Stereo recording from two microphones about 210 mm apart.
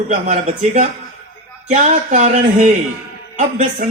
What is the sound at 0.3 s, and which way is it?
Speech, 35° right (ahead or behind).